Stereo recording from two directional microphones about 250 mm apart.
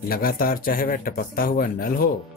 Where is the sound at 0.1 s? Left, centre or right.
Left.